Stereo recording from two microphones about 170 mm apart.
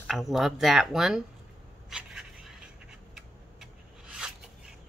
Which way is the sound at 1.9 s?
5° right (ahead or behind).